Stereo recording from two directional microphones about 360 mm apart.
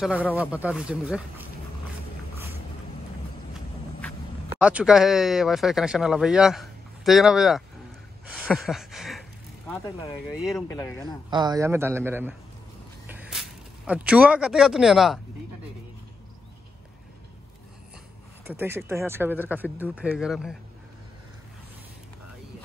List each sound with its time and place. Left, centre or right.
0.0 s speech: centre
4.6 s speech: centre
8.3 s a sound: centre
9.7 s speech: centre
11.2 s a man's voice: centre
13.0 s a sound: centre
18.5 s speech: centre